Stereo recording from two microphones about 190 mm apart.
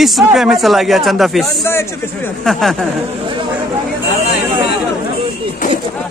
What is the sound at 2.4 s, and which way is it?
Speech, centre (ahead or behind).